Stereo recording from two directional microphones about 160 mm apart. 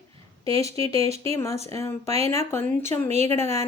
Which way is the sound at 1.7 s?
20° left (ahead or behind).